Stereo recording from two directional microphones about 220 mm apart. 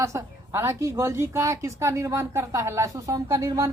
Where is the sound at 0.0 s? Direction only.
15° right (ahead or behind).